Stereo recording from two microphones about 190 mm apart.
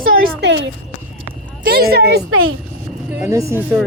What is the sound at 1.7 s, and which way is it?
Speech, 55° right (ahead or behind).